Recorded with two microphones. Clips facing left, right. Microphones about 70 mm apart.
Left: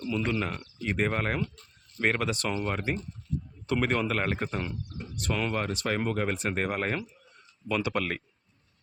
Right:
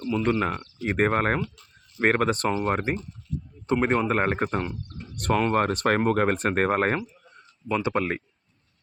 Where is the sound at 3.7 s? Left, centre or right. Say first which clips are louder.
Right 5 dB; right.